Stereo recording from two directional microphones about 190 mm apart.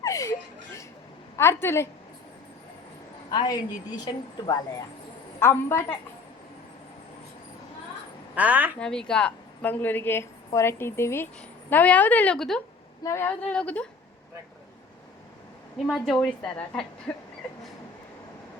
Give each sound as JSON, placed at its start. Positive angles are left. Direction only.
{"t": 0.0, "sound": "chuckle", "side_deg": 15}
{"t": 1.4, "sound": "a woman's voice", "side_deg": 15}
{"t": 3.2, "sound": "a woman's voice", "side_deg": 25}
{"t": 5.4, "sound": "a woman's voice", "side_deg": 15}
{"t": 8.4, "sound": "a woman's voice", "side_deg": -10}
{"t": 8.8, "sound": "a woman's voice", "side_deg": 5}
{"t": 13.0, "sound": "a woman's voice", "side_deg": 15}
{"t": 15.9, "sound": "a woman's voice", "side_deg": 5}